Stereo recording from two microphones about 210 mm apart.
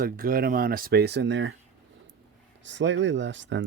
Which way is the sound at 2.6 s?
60° right (ahead or behind).